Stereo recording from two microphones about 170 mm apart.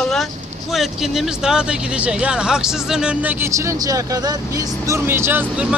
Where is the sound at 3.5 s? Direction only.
20° right (ahead or behind).